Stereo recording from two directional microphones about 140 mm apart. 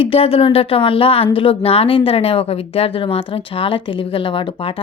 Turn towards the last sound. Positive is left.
turn(degrees=40)  # may be behind; listen again after turning